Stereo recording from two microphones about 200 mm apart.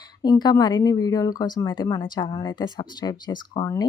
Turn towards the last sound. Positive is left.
turn(degrees=20)  # may be behind; listen again after turning